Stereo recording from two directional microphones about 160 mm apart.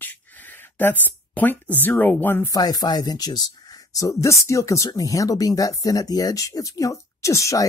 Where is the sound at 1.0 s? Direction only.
10° left (ahead or behind).